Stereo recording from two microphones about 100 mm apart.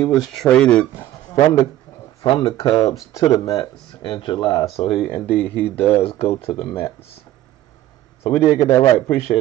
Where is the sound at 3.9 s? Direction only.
60° left (ahead or behind).